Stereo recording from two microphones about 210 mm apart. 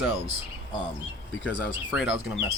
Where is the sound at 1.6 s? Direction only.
Centre (ahead or behind).